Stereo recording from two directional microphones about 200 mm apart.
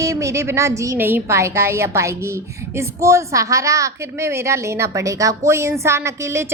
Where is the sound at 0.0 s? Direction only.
15° right (ahead or behind).